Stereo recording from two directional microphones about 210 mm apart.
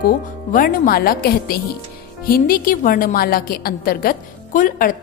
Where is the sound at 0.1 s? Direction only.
40° left (ahead or behind).